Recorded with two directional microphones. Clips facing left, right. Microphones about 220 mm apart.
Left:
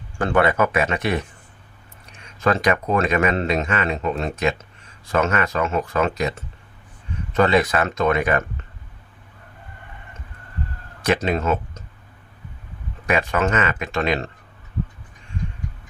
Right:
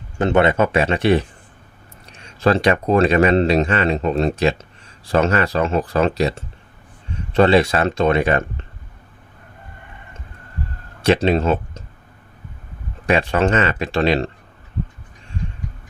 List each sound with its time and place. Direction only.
0.2 s speech: 25° right (ahead or behind)
11.0 s speech: 30° right (ahead or behind)
13.1 s speech: 30° right (ahead or behind)